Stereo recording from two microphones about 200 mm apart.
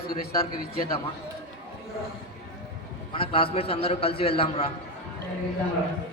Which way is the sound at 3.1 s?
25° left (ahead or behind).